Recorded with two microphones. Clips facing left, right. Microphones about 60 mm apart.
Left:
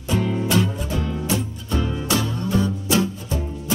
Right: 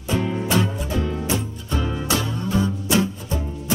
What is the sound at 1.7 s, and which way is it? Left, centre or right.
Music, centre.